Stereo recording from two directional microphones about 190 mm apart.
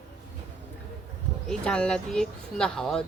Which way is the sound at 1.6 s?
5° left (ahead or behind).